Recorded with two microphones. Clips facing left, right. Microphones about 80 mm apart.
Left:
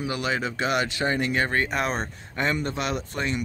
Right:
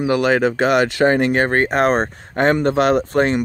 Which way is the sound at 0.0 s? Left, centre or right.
Right.